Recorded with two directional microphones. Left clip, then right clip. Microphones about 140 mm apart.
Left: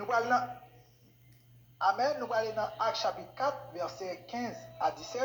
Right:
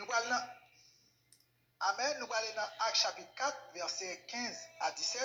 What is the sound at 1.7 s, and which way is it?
Speech, 15° right (ahead or behind).